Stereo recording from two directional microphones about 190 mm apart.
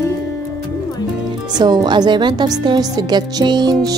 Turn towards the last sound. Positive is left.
turn(degrees=-20)  # may be behind; listen again after turning